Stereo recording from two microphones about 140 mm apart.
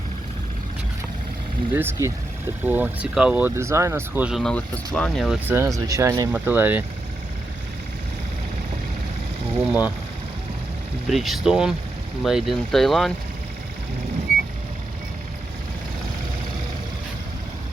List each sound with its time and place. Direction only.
1.7 s speech: 15° right (ahead or behind)
4.4 s speech: 5° left (ahead or behind)
5.5 s speech: 20° right (ahead or behind)
9.6 s speech: 10° right (ahead or behind)
11.1 s speech: centre (ahead or behind)